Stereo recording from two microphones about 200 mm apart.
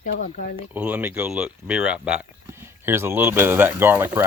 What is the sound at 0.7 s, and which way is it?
Speech, 5° right (ahead or behind).